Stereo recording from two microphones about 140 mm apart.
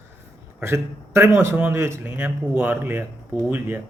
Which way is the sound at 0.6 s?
20° right (ahead or behind).